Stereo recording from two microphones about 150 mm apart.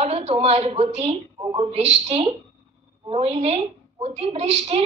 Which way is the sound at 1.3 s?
25° right (ahead or behind).